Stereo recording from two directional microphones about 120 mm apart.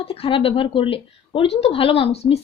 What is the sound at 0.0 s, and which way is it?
Speech, 55° left (ahead or behind).